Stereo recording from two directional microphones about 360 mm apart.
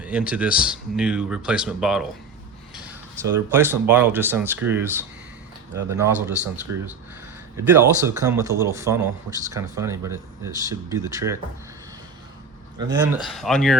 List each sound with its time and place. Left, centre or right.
0.0 s speech: centre
6.7 s speech: right
7.5 s speech: centre
12.9 s speech: centre
13.2 s speech: centre